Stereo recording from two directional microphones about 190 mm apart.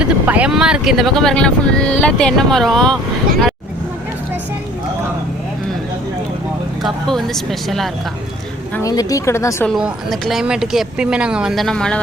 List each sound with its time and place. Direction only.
0.0 s speech: 5° right (ahead or behind)
6.8 s speech: centre (ahead or behind)
8.7 s speech: 20° left (ahead or behind)
9.6 s speech: centre (ahead or behind)